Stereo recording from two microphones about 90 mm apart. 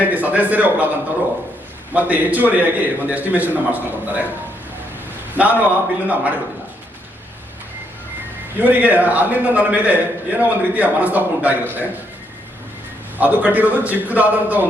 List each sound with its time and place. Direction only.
0.0 s a man's voice: 20° right (ahead or behind)
1.9 s a man's voice: 15° right (ahead or behind)
5.3 s a man's voice: 20° right (ahead or behind)
8.5 s a man's voice: 20° right (ahead or behind)
13.1 s a man's voice: 20° right (ahead or behind)